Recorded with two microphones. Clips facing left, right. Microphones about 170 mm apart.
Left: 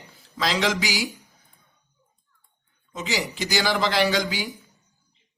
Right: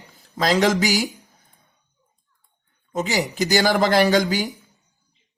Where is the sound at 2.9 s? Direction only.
45° right (ahead or behind).